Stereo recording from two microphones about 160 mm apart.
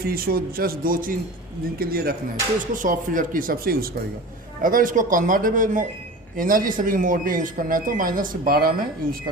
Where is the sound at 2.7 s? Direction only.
55° right (ahead or behind).